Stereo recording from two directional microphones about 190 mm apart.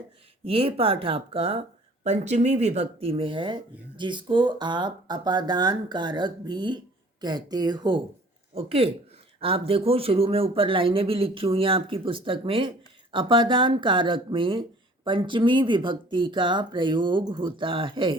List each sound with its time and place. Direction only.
0.4 s speech: 30° right (ahead or behind)